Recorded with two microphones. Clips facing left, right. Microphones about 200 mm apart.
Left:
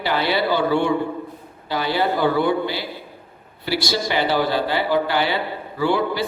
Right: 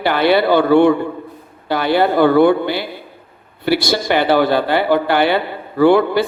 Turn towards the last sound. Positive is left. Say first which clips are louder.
# right 9 dB
turn(degrees=-60)  # may be behind; listen again after turning